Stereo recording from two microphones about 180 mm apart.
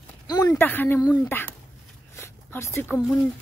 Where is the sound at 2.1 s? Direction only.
15° left (ahead or behind).